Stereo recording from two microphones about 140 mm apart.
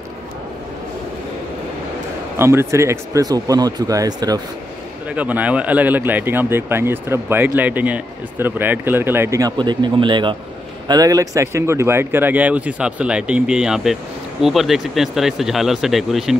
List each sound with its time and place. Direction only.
2.3 s speech: 20° right (ahead or behind)
5.1 s speech: 10° right (ahead or behind)
9.6 s speech: 35° right (ahead or behind); by 16.3 s centre (ahead or behind)